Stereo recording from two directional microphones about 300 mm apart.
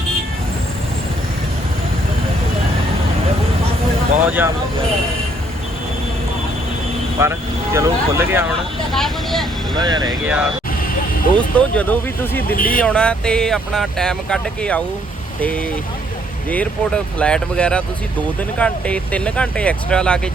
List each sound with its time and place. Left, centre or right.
4.3 s speech: centre
7.2 s speech: centre
8.9 s vehicle: centre
9.8 s speech: centre
11.5 s speech: centre
12.5 s speech: left
12.8 s speech: centre